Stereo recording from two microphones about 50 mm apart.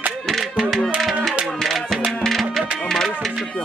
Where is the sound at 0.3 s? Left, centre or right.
Centre.